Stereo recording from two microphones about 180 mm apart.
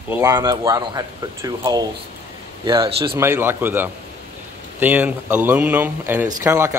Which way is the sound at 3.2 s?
15° right (ahead or behind).